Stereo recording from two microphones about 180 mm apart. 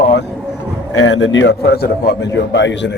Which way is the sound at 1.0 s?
90° left.